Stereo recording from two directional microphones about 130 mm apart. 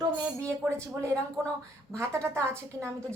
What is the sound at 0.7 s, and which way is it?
A woman's voice, 20° right (ahead or behind).